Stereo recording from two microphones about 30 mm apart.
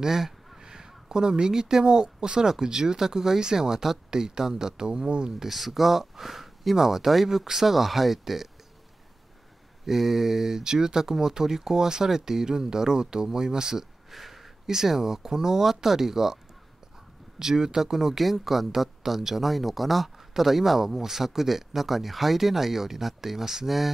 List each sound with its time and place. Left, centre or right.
0.0 s speech: centre; by 5.3 s right
5.4 s speech: centre
9.8 s speech: centre
14.1 s a sound: centre
14.7 s speech: centre
17.4 s speech: centre